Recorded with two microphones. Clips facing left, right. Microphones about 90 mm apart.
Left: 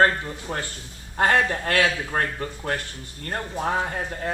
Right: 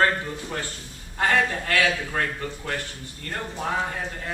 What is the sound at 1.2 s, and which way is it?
Speech, 55° left (ahead or behind).